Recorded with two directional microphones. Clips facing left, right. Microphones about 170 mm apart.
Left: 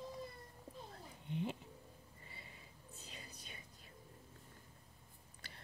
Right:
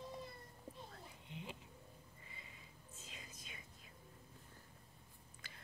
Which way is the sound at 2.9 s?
35° left (ahead or behind).